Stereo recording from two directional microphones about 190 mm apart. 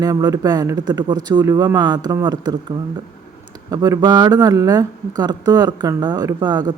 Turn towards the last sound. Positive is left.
turn(degrees=-20)  # may be behind; listen again after turning